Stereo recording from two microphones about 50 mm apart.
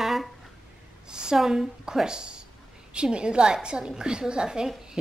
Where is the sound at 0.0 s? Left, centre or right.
Centre.